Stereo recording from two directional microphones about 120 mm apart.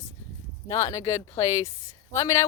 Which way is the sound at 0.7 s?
25° left (ahead or behind).